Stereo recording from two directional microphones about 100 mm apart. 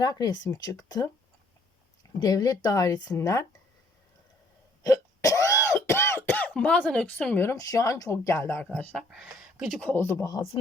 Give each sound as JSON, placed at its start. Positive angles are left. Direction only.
{"t": 0.0, "sound": "speech", "side_deg": 40}
{"t": 2.1, "sound": "speech", "side_deg": 40}
{"t": 4.8, "sound": "a sound", "side_deg": 35}
{"t": 7.5, "sound": "speech", "side_deg": 35}
{"t": 8.7, "sound": "speech", "side_deg": 10}
{"t": 9.0, "sound": "speech", "side_deg": -5}
{"t": 9.8, "sound": "speech", "side_deg": 20}